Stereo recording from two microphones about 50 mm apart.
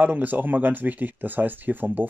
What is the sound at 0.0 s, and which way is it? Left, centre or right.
Speech, right.